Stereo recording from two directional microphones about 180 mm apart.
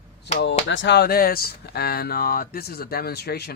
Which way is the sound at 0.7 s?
80° left.